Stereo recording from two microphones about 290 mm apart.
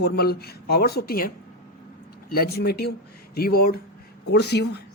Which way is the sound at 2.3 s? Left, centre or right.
Left.